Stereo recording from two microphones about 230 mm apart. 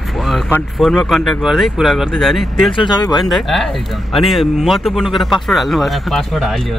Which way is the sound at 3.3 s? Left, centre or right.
Centre.